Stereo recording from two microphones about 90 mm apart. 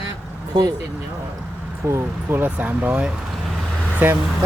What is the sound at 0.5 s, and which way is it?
Speech, 50° right (ahead or behind).